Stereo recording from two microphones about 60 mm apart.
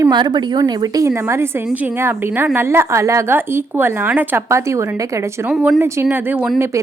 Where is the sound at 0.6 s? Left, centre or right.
Right.